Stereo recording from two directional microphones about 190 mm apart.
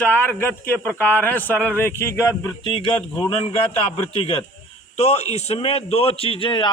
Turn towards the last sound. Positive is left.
turn(degrees=25)  # may be behind; listen again after turning